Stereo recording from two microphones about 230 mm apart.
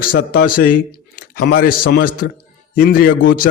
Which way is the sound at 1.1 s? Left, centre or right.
Left.